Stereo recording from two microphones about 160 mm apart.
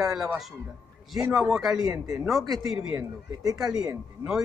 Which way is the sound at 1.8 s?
20° right (ahead or behind).